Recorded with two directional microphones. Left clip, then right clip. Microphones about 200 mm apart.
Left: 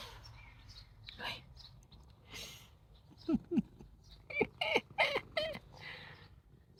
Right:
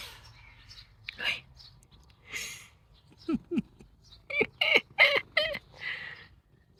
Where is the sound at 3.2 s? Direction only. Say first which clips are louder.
Right 3 dB; 10° right (ahead or behind).